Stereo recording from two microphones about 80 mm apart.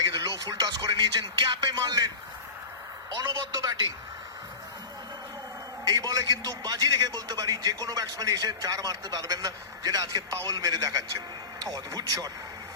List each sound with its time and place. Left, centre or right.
0.0 s a man's voice: right
3.2 s a man's voice: right
5.8 s a man's voice: right